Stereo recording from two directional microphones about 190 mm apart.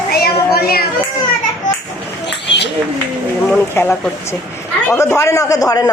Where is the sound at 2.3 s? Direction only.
65° left (ahead or behind).